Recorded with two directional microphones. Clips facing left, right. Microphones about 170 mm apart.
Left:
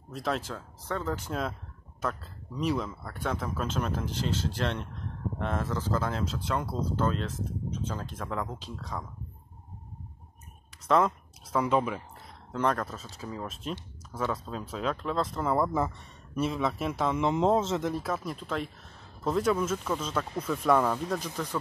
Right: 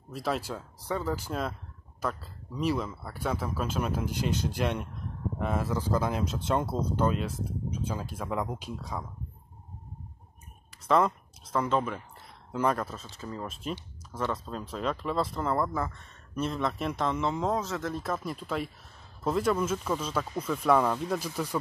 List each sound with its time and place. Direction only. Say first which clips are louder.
0.1 s speech: even; 5° right (ahead or behind)
10.9 s a man's voice: even; centre (ahead or behind)
12.5 s speech: even; 5° right (ahead or behind)
15.4 s a man's voice: left 3 dB; 10° left (ahead or behind)
15.7 s speech: left 3 dB; 20° left (ahead or behind)
16.3 s a man's voice: left 1 dB; 5° left (ahead or behind); by 17.9 s 20° left (ahead or behind)
17.9 s speech: left 1 dB; centre (ahead or behind)